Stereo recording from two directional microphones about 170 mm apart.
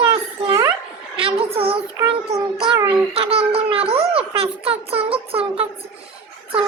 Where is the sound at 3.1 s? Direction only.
35° right (ahead or behind).